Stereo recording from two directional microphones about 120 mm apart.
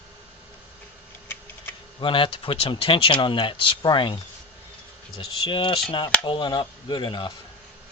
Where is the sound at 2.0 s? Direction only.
45° left (ahead or behind).